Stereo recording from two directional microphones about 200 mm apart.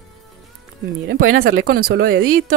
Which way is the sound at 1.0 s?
90° right.